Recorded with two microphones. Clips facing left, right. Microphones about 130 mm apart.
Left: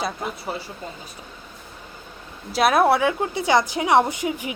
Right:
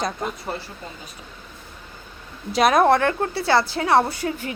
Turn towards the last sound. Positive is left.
turn(degrees=15)  # may be behind; listen again after turning